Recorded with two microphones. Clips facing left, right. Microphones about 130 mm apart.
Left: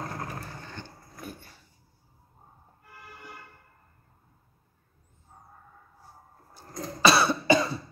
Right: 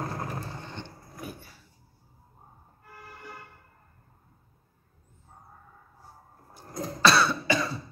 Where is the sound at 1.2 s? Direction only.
5° right (ahead or behind).